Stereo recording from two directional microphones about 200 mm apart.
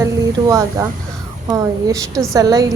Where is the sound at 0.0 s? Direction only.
15° right (ahead or behind).